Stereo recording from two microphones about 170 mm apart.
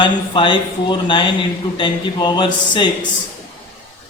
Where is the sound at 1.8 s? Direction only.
25° left (ahead or behind).